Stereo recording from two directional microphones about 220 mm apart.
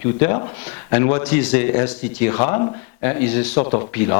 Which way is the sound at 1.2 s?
10° left (ahead or behind).